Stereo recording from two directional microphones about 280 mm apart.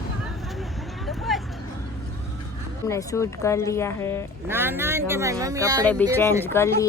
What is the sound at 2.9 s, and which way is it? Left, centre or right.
Speech, centre.